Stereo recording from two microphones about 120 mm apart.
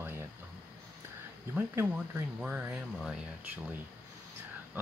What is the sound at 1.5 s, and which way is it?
Speech, 15° right (ahead or behind).